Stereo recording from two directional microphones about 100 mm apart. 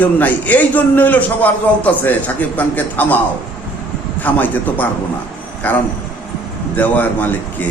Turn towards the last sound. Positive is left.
turn(degrees=15)  # may be behind; listen again after turning